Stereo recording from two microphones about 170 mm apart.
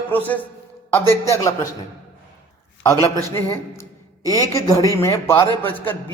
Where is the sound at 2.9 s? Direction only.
15° left (ahead or behind).